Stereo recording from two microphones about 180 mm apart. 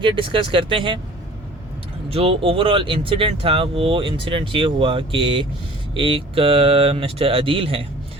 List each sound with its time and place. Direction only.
0.0 s speech: 25° right (ahead or behind)
2.0 s speech: 30° right (ahead or behind)